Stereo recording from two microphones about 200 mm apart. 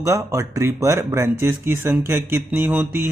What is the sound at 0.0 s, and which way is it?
Speech, 15° right (ahead or behind).